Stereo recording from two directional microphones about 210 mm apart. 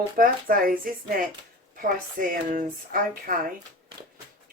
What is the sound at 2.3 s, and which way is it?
Speech, 40° right (ahead or behind).